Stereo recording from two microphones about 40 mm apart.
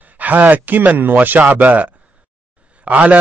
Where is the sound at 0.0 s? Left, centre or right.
Right.